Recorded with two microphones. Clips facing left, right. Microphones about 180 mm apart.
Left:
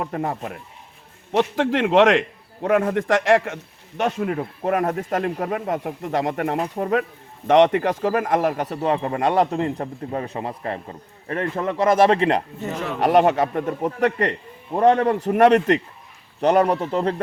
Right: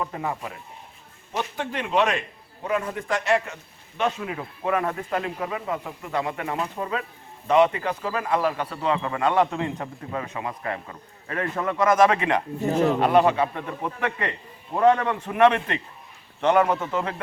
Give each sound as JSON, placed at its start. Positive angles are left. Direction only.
{"t": 0.0, "sound": "speech", "side_deg": 50}
{"t": 1.3, "sound": "a man's voice", "side_deg": 75}
{"t": 2.6, "sound": "a man's voice", "side_deg": 65}
{"t": 3.1, "sound": "a man's voice", "side_deg": 90}
{"t": 3.9, "sound": "speech", "side_deg": 50}
{"t": 7.4, "sound": "speech", "side_deg": 70}
{"t": 12.5, "sound": "speech", "side_deg": -35}
{"t": 13.2, "sound": "speech", "side_deg": 45}